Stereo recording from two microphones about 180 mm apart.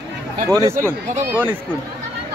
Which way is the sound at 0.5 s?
15° right (ahead or behind).